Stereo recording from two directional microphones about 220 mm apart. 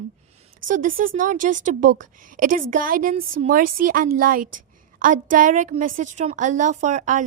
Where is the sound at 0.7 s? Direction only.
40° right (ahead or behind).